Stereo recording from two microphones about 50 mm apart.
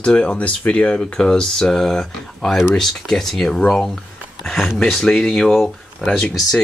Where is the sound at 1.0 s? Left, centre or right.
Centre.